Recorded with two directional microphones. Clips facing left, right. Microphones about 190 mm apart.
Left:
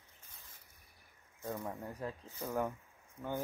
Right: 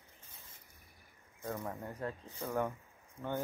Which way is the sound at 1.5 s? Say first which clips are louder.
Even; 5° left (ahead or behind).